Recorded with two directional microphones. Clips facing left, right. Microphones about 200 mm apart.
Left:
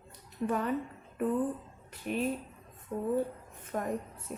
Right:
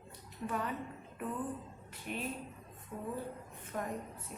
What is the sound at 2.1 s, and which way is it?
Speech, 45° left (ahead or behind).